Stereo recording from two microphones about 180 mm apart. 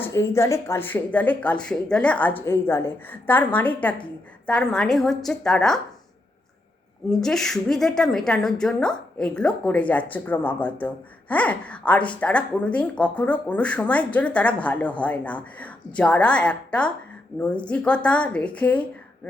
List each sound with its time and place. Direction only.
0.0 s a woman's voice: 15° left (ahead or behind)
7.1 s a woman's voice: 5° left (ahead or behind)